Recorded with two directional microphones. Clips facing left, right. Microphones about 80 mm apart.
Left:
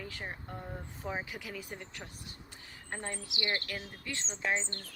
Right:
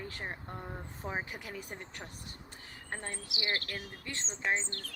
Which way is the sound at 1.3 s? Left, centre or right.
Right.